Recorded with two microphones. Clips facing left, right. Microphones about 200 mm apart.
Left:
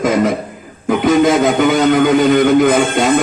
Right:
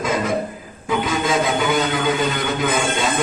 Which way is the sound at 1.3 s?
50° left (ahead or behind).